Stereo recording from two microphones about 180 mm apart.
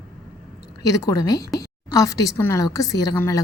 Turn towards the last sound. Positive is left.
turn(degrees=15)  # may be behind; listen again after turning